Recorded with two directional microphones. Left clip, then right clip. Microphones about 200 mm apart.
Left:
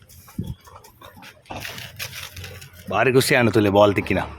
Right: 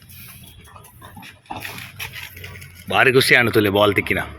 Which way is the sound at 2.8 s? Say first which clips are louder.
Right 4 dB; 15° left (ahead or behind).